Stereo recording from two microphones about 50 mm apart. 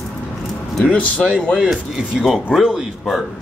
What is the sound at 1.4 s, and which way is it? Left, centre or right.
Speech, centre.